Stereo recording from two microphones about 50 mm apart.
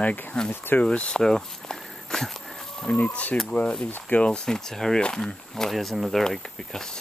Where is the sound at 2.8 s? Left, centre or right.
Left.